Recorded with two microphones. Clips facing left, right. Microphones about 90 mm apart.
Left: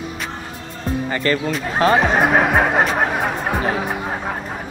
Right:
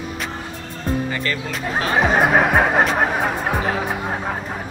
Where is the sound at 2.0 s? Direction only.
Centre (ahead or behind).